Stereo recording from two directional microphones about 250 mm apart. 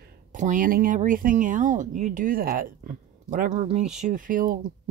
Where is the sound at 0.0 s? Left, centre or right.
Right.